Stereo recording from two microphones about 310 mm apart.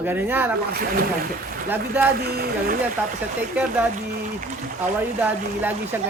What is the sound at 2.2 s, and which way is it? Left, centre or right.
Speech, right.